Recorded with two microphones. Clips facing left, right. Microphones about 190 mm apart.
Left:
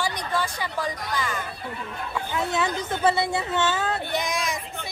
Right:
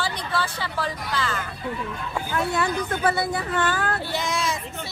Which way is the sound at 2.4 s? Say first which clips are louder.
Right 2 dB; 20° left (ahead or behind).